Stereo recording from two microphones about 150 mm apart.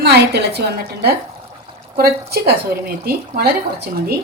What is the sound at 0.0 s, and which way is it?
A woman's voice, 90° right.